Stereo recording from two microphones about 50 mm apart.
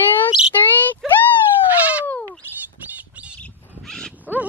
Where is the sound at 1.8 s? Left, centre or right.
Right.